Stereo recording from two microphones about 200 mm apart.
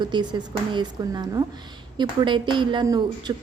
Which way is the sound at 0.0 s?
20° right (ahead or behind).